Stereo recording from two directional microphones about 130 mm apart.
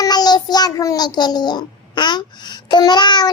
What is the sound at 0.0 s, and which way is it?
A child's voice, 30° left (ahead or behind).